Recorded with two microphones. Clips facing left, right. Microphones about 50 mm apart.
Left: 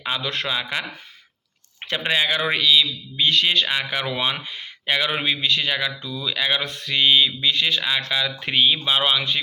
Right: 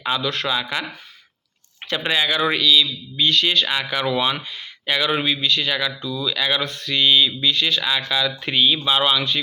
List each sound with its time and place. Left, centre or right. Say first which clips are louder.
0.1 s speech: right 3 dB; left
1.9 s speech: right 1 dB; left